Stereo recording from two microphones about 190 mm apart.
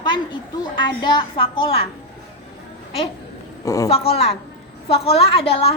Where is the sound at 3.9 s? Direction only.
30° left (ahead or behind).